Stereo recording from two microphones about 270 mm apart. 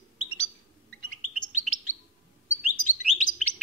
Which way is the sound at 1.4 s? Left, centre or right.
Left.